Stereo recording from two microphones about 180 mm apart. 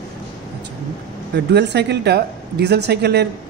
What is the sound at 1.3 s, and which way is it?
A woman's voice, 70° right (ahead or behind).